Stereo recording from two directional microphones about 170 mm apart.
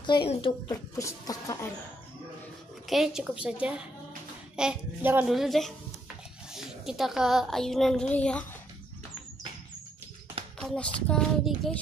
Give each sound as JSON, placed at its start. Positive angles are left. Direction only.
{"t": 0.0, "sound": "speech", "side_deg": 30}
{"t": 2.9, "sound": "a woman's voice", "side_deg": -5}
{"t": 10.6, "sound": "speech", "side_deg": 5}